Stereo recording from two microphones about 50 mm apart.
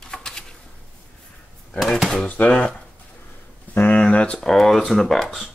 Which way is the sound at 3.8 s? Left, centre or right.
Left.